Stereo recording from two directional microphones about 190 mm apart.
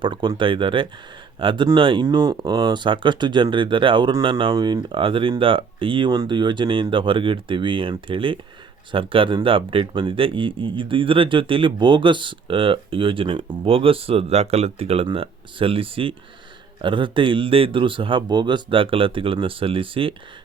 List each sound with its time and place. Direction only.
0.0 s speech: 25° right (ahead or behind)